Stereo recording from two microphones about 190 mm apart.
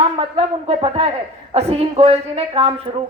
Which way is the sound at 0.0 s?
30° right (ahead or behind).